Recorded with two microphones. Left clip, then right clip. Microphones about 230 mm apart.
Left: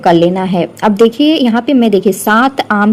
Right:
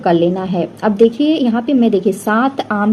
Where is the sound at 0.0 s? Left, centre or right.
Left.